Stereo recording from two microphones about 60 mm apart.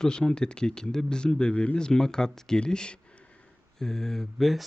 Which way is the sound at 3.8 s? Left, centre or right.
Centre.